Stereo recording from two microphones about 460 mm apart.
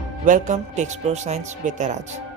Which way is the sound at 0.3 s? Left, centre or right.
Centre.